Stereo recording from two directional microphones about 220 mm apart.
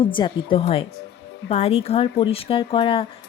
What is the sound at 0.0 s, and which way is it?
Speech, 20° left (ahead or behind).